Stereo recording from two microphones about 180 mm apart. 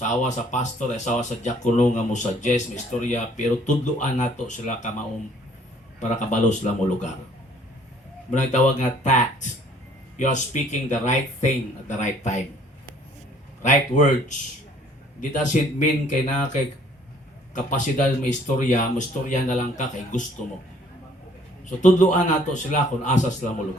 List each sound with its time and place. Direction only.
0.0 s speech: 40° left (ahead or behind)
6.0 s speech: 40° left (ahead or behind)
8.3 s speech: 40° left (ahead or behind)
13.6 s speech: 45° left (ahead or behind)
21.8 s speech: 45° left (ahead or behind)